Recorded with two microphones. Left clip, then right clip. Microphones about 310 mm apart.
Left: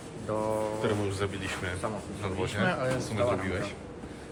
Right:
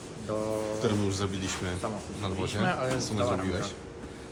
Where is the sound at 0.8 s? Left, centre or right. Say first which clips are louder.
Even; centre.